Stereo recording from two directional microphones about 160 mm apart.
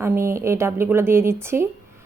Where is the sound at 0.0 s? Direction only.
15° right (ahead or behind).